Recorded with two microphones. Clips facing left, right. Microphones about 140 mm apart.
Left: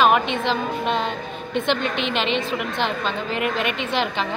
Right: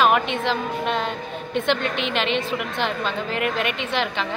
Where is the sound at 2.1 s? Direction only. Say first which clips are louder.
Even; 30° left (ahead or behind).